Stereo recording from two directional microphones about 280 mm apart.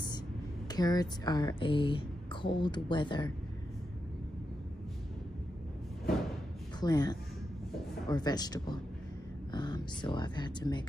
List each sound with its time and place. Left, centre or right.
0.7 s speech: centre
6.8 s speech: centre